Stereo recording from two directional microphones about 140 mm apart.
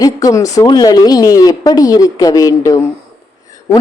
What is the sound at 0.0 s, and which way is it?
Speech, 25° left (ahead or behind).